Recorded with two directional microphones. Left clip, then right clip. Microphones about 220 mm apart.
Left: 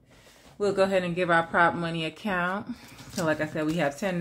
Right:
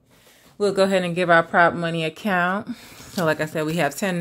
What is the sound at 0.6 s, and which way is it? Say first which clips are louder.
Speech: right 5 dB; 45° right (ahead or behind).